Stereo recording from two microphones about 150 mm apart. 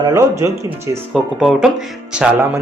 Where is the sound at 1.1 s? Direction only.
Centre (ahead or behind).